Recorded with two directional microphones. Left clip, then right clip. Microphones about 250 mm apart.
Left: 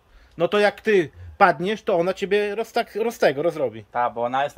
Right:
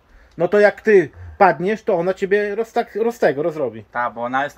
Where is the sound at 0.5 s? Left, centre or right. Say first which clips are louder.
Right 6 dB; centre.